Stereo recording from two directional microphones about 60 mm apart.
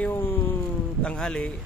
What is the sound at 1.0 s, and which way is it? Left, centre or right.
Speech, centre.